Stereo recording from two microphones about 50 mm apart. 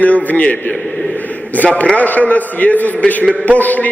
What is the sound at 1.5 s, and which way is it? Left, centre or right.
A man's voice, left.